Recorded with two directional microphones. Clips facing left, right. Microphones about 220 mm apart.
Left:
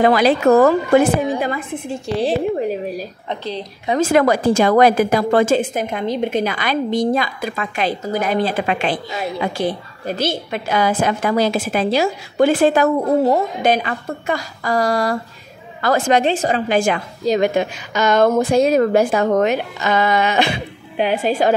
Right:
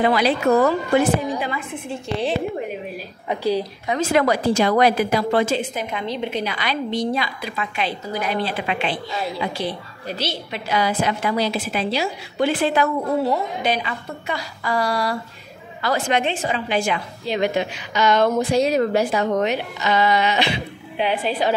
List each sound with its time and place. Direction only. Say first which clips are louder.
0.0 s a woman's voice: left 5 dB; 45° left (ahead or behind)
2.2 s speech: left 6 dB; 35° left (ahead or behind)
3.3 s a woman's voice: right 6 dB; 10° right (ahead or behind)
4.0 s a woman's voice: left 4 dB; 50° left (ahead or behind)